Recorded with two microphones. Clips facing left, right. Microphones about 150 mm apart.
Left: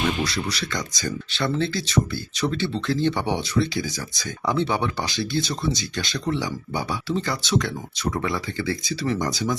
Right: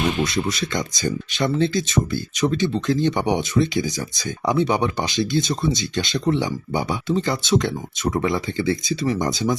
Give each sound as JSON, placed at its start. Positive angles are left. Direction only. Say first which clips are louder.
{"t": 0.2, "sound": "speech", "louder": "right 4 dB", "side_deg": -20}